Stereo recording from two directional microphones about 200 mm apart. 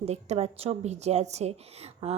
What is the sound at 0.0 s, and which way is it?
A woman's voice, 35° right (ahead or behind).